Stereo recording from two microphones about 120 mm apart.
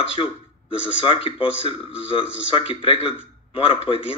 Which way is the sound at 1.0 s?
45° left (ahead or behind).